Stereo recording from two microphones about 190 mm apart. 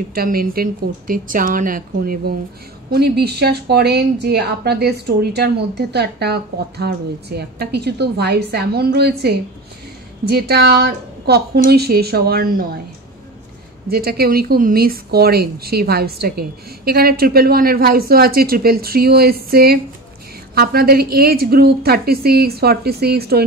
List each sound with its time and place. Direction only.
0.1 s a woman's voice: 50° right (ahead or behind)
13.8 s a woman's voice: 55° right (ahead or behind)